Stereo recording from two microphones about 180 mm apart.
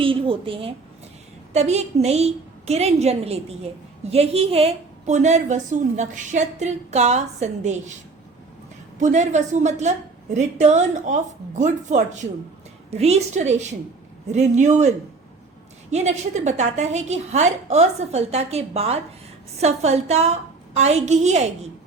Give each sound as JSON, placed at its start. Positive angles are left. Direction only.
{"t": 0.0, "sound": "a woman's voice", "side_deg": -30}
{"t": 9.0, "sound": "a woman's voice", "side_deg": -40}